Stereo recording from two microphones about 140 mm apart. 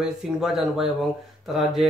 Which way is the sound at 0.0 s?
5° right (ahead or behind).